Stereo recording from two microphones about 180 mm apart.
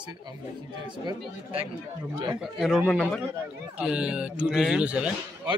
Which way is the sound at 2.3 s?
Centre (ahead or behind).